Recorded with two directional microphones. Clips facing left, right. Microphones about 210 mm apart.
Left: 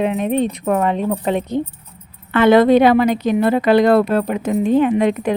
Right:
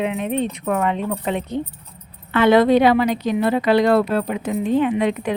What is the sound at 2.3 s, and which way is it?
A woman's voice, 50° left (ahead or behind).